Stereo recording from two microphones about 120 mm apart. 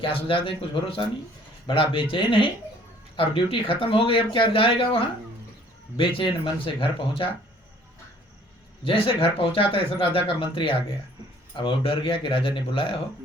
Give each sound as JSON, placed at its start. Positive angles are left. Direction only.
{"t": 0.0, "sound": "speech", "side_deg": 50}
{"t": 8.8, "sound": "speech", "side_deg": 50}